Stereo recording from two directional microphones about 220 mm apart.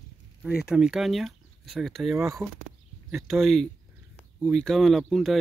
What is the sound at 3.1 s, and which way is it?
Speech, centre (ahead or behind).